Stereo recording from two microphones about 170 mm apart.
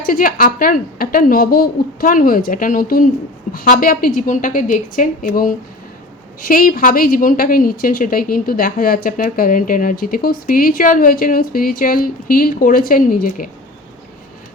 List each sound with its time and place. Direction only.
0.0 s a woman's voice: 55° left (ahead or behind)